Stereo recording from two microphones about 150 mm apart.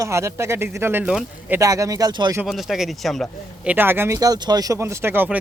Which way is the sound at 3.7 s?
15° right (ahead or behind).